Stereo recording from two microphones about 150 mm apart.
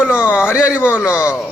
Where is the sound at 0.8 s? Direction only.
15° left (ahead or behind).